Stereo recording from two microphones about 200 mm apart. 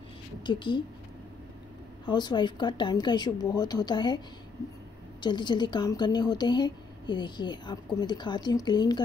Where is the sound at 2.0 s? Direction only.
20° left (ahead or behind).